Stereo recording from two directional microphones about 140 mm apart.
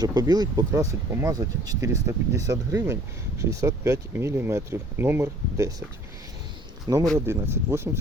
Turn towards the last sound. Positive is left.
turn(degrees=-15)  # may be behind; listen again after turning